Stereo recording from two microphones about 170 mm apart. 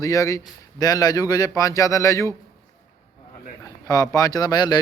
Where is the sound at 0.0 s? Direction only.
20° left (ahead or behind).